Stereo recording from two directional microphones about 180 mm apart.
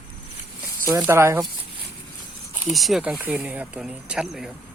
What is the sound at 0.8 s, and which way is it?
Speech, 10° right (ahead or behind).